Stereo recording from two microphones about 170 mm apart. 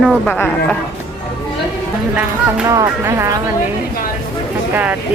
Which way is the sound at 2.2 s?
5° right (ahead or behind).